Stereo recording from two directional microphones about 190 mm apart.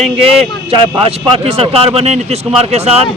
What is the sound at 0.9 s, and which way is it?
Speech, 30° right (ahead or behind).